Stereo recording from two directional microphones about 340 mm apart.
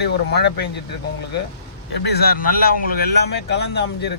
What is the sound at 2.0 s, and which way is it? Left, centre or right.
A man's voice, left.